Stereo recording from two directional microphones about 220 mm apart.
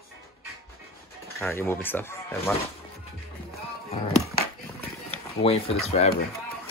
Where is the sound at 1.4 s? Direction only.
10° left (ahead or behind).